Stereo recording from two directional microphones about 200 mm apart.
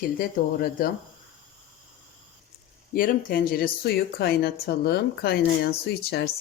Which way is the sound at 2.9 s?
45° left (ahead or behind).